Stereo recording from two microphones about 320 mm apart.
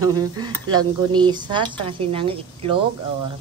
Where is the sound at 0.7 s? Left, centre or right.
Centre.